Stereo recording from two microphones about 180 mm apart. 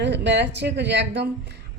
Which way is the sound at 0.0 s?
75° right (ahead or behind).